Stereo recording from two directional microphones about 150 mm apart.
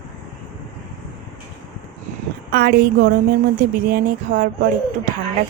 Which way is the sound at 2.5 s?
85° right.